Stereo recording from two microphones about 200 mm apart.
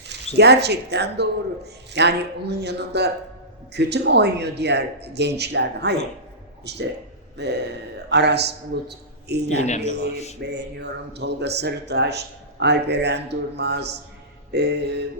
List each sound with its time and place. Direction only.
0.3 s a man's voice: 55° right (ahead or behind)
8.1 s a man's voice: 55° right (ahead or behind)
9.6 s speech: 35° left (ahead or behind)
9.8 s a man's voice: 55° right (ahead or behind)